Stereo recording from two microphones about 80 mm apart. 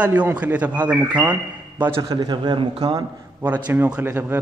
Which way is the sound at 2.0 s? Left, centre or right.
Right.